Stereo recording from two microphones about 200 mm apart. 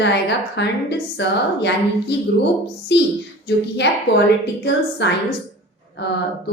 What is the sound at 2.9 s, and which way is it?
Speech, 60° left (ahead or behind).